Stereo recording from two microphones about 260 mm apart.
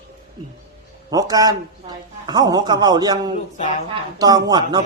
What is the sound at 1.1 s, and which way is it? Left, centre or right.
Speech, centre.